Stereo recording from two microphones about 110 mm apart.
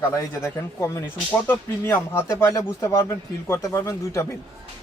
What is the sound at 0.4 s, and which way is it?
Speech, 25° left (ahead or behind).